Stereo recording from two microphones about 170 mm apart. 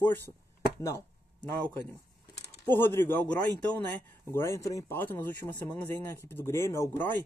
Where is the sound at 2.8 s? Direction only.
15° left (ahead or behind).